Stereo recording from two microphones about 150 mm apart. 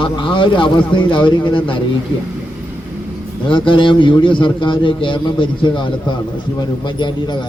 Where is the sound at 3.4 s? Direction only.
35° left (ahead or behind).